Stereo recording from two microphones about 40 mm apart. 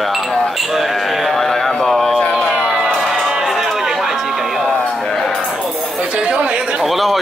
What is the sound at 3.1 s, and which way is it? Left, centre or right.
Music, centre.